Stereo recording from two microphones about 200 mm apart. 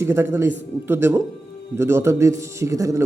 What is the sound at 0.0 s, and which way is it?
A man's voice, 15° right (ahead or behind).